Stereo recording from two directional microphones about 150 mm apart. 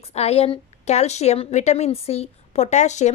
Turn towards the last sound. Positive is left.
turn(degrees=50)  # may be behind; listen again after turning